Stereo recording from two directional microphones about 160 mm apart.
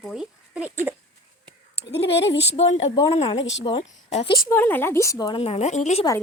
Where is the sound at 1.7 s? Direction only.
90° left.